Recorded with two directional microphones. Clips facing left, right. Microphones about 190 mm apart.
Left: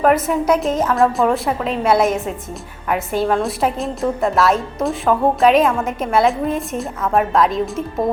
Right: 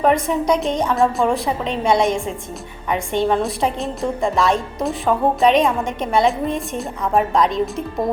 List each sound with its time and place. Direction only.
0.0 s a woman's voice: 5° left (ahead or behind)